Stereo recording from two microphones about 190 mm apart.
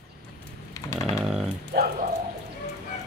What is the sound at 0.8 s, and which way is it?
Chainsaw, 15° left (ahead or behind).